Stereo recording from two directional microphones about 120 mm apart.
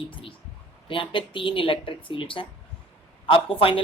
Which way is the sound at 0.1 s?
45° left (ahead or behind).